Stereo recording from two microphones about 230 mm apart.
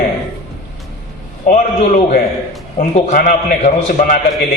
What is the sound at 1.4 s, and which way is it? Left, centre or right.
A man's voice, left.